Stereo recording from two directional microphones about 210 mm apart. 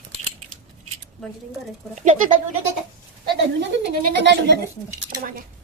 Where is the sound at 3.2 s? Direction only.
55° right (ahead or behind).